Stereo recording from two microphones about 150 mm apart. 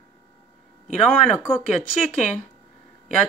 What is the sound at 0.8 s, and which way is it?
Speech, 5° left (ahead or behind).